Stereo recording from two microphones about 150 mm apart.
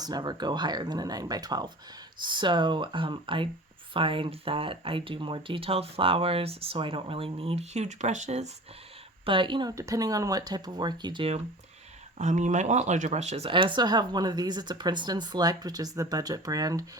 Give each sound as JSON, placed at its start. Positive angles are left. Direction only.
{"t": 0.0, "sound": "speech", "side_deg": -25}
{"t": 9.2, "sound": "speech", "side_deg": -35}
{"t": 9.7, "sound": "speech", "side_deg": -20}
{"t": 12.1, "sound": "speech", "side_deg": -55}